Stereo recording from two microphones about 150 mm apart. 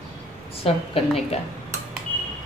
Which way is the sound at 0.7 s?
40° left (ahead or behind).